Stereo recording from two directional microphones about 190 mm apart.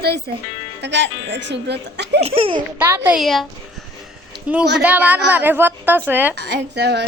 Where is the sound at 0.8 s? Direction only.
65° right (ahead or behind).